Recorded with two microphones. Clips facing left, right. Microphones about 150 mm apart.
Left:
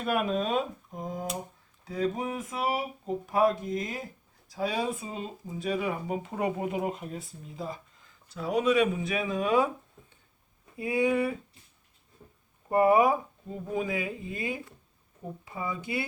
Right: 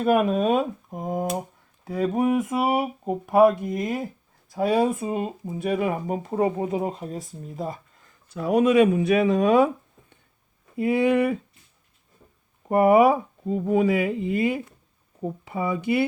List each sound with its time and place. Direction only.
0.0 s speech: 45° right (ahead or behind); by 9.6 s 70° right (ahead or behind)
10.8 s speech: 65° right (ahead or behind)
12.6 s speech: 65° right (ahead or behind)